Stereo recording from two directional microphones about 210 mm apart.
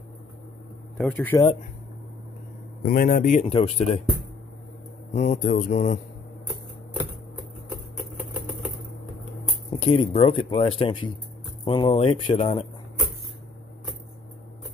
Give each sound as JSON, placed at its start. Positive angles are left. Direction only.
{"t": 0.9, "sound": "speech", "side_deg": 5}
{"t": 2.8, "sound": "speech", "side_deg": 40}
{"t": 5.1, "sound": "speech", "side_deg": 35}
{"t": 9.7, "sound": "a sound", "side_deg": 25}
{"t": 10.1, "sound": "speech", "side_deg": 25}